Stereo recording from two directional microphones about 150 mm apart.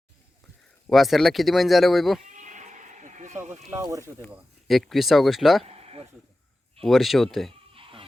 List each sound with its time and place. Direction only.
0.9 s speech: centre (ahead or behind)
2.3 s sheep: 55° right (ahead or behind)
3.5 s speech: 20° right (ahead or behind)
4.7 s speech: centre (ahead or behind)
5.6 s a sound: 45° right (ahead or behind)
6.8 s speech: centre (ahead or behind)
7.7 s bleat: 35° right (ahead or behind)